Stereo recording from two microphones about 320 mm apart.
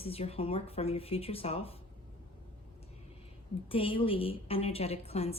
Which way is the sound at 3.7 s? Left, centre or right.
Centre.